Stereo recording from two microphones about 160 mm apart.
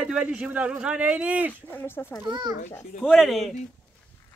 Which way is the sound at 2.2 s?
25° right (ahead or behind).